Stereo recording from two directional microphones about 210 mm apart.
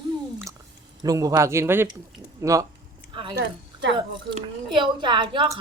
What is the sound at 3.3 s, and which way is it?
Speech, 55° right (ahead or behind).